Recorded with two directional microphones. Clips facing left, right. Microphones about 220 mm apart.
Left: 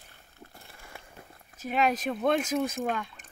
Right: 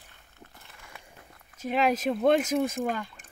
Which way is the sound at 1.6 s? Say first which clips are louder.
Right 2 dB; 25° right (ahead or behind).